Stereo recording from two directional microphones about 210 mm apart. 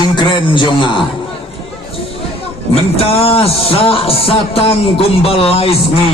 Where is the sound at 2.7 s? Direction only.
30° left (ahead or behind).